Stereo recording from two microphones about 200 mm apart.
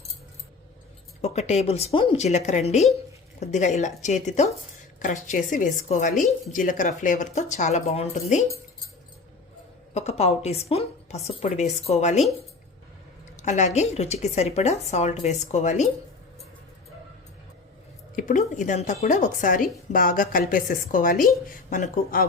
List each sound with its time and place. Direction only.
1.2 s speech: 35° left (ahead or behind)
9.9 s speech: 35° left (ahead or behind)
13.3 s speech: 35° left (ahead or behind)
18.2 s a woman's voice: 40° left (ahead or behind)